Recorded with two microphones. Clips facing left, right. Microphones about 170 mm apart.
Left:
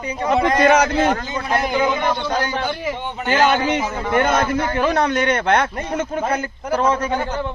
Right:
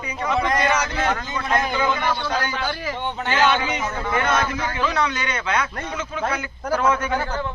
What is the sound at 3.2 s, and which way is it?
A man's voice, 45° left (ahead or behind).